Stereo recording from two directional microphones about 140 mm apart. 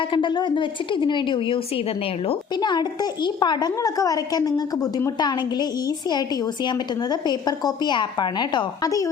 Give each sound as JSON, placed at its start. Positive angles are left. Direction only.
{"t": 0.1, "sound": "a woman's voice", "side_deg": 35}
{"t": 2.6, "sound": "a woman's voice", "side_deg": 30}
{"t": 6.7, "sound": "a woman's voice", "side_deg": 30}